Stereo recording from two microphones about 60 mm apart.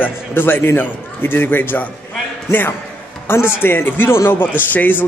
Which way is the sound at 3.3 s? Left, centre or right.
Left.